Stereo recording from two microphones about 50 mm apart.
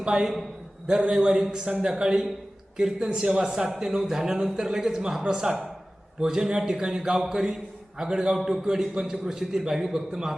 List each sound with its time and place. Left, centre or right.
0.0 s a man's voice: centre